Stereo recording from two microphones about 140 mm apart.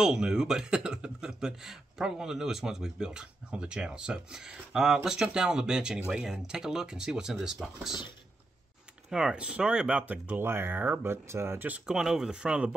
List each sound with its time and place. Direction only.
0.0 s speech: 5° right (ahead or behind)
9.1 s speech: 5° right (ahead or behind)